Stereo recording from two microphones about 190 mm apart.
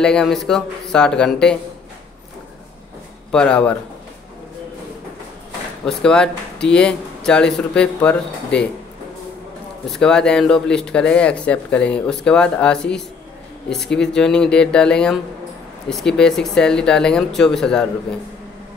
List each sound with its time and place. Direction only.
0.0 s speech: 5° left (ahead or behind)
3.3 s speech: 5° left (ahead or behind)
5.9 s speech: 5° left (ahead or behind)
9.8 s speech: 5° left (ahead or behind)